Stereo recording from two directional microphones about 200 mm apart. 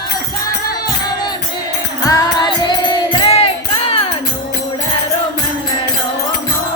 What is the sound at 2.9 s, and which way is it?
Music, 30° left (ahead or behind).